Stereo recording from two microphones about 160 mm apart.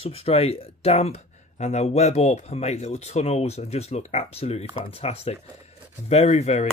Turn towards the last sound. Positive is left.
turn(degrees=45)  # may be behind; listen again after turning